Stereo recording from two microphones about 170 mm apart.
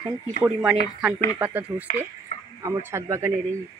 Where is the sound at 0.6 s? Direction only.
10° right (ahead or behind).